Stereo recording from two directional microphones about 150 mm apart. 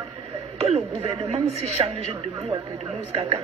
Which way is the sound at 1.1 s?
40° right (ahead or behind).